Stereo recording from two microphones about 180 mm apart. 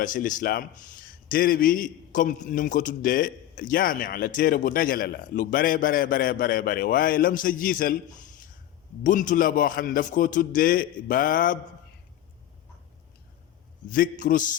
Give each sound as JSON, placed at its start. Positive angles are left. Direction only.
{"t": 0.0, "sound": "a man's voice", "side_deg": 50}
{"t": 9.0, "sound": "a man's voice", "side_deg": 45}
{"t": 13.9, "sound": "a man's voice", "side_deg": 50}